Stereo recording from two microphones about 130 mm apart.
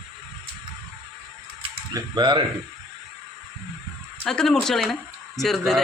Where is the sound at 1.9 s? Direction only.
35° right (ahead or behind).